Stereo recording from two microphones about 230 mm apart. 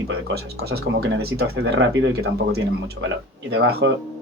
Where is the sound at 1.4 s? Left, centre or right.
Right.